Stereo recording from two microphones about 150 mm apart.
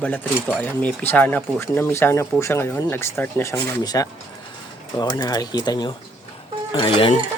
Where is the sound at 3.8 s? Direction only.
25° left (ahead or behind).